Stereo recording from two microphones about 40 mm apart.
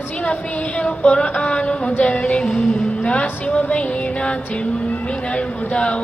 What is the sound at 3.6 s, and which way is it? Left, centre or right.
A man's voice, left.